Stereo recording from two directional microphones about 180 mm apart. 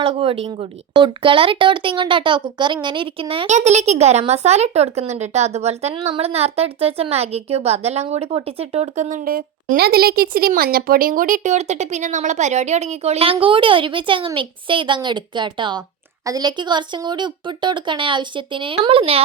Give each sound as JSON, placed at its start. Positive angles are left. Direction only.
{"t": 0.0, "sound": "a woman's voice", "side_deg": -30}